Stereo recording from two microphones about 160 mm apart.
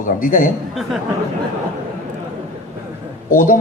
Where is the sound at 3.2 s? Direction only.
60° left (ahead or behind).